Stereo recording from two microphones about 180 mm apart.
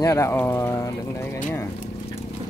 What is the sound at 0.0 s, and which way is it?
Speech, 15° left (ahead or behind).